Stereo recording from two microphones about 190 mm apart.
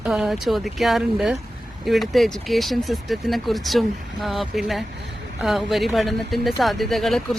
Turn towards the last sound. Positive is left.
turn(degrees=0)  # may be behind; listen again after turning